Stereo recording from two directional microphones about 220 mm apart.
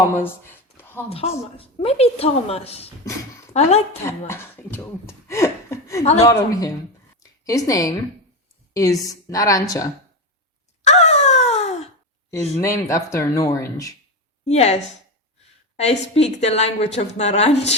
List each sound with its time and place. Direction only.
0.2 s a sound: 10° left (ahead or behind)
1.1 s a woman's voice: 25° left (ahead or behind)
4.0 s speech: 10° left (ahead or behind)
7.2 s a sound: 15° left (ahead or behind)
8.7 s speech: 15° left (ahead or behind)
10.8 s wail: 30° left (ahead or behind)
12.3 s speech: 15° left (ahead or behind)
14.4 s a woman's voice: 30° left (ahead or behind)
15.8 s a woman's voice: 30° left (ahead or behind)